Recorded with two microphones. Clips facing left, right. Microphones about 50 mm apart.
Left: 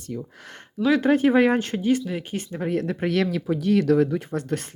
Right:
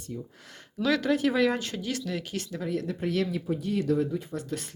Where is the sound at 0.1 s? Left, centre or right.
Left.